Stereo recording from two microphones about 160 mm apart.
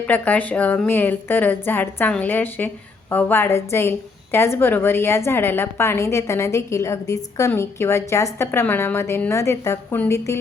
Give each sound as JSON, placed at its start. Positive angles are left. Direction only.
{"t": 0.1, "sound": "a woman's voice", "side_deg": 10}